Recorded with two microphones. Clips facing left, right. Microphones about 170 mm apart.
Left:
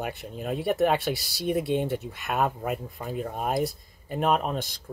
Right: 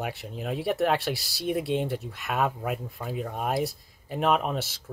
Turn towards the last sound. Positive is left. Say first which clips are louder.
# even
turn(degrees=-5)  # may be behind; listen again after turning